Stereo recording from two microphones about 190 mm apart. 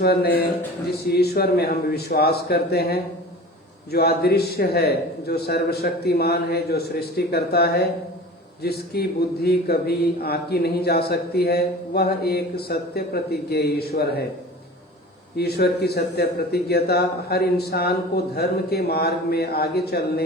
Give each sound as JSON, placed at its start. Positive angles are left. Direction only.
{"t": 0.0, "sound": "a man's voice", "side_deg": 55}
{"t": 15.4, "sound": "a man's voice", "side_deg": 55}